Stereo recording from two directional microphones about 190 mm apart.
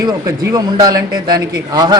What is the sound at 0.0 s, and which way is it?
A man's voice, 20° right (ahead or behind).